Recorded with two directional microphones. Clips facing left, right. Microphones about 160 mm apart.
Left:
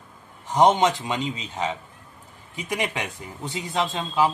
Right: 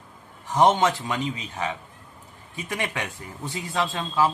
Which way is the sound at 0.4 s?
20° left (ahead or behind).